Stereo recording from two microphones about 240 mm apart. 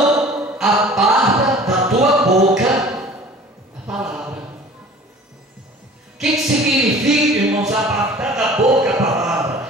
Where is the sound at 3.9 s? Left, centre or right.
Centre.